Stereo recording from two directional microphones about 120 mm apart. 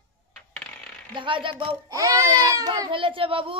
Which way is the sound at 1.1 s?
45° right (ahead or behind).